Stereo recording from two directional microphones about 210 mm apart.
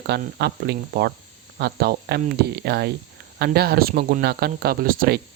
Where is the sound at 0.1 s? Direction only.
50° right (ahead or behind).